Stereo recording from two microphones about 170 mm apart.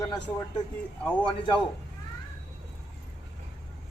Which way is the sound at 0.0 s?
20° left (ahead or behind).